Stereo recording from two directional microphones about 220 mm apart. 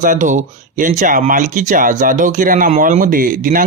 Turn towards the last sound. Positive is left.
turn(degrees=-40)  # may be behind; listen again after turning